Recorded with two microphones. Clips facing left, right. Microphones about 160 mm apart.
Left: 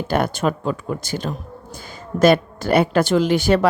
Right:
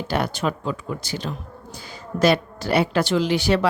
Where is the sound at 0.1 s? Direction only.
50° left (ahead or behind).